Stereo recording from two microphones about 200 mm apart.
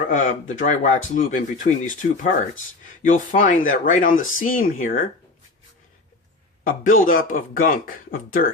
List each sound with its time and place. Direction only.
0.1 s speech: 40° left (ahead or behind)
6.7 s speech: 40° left (ahead or behind)